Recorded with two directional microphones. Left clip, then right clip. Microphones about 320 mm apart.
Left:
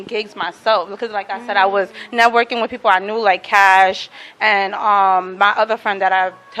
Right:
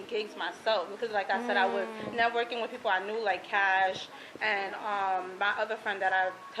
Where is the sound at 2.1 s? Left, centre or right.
Left.